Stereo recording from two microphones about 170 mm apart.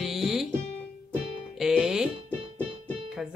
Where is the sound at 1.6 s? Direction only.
5° right (ahead or behind).